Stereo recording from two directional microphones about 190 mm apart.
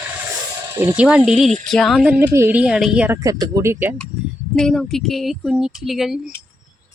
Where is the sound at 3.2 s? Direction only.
15° right (ahead or behind).